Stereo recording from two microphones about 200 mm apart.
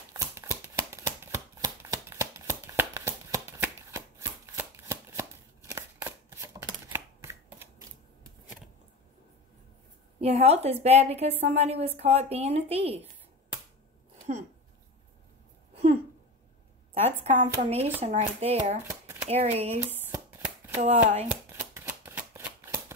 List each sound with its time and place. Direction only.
0.1 s a sound: 15° right (ahead or behind)
10.2 s a woman's voice: 30° right (ahead or behind)
16.9 s a woman's voice: 30° right (ahead or behind)
20.1 s shuffling cards: 10° right (ahead or behind)
20.7 s a woman's voice: 35° right (ahead or behind)
21.5 s shuffling cards: 15° right (ahead or behind)